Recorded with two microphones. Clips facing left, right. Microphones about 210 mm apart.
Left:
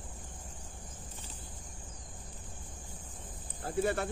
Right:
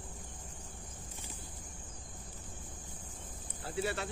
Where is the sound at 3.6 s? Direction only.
50° left (ahead or behind).